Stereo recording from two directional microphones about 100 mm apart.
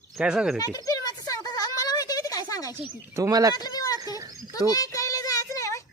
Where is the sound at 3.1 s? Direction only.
35° right (ahead or behind).